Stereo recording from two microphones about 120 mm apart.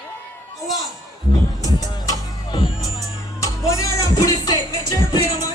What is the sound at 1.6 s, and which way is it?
Music, 35° left (ahead or behind).